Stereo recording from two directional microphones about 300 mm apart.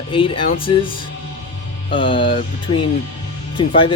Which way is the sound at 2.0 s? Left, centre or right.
Centre.